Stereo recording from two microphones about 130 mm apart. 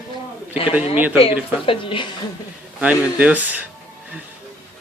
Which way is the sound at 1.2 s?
45° left (ahead or behind).